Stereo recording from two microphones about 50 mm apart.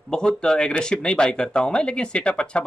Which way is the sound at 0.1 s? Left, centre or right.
Centre.